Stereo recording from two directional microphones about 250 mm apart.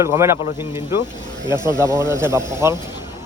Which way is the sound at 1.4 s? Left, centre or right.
Centre.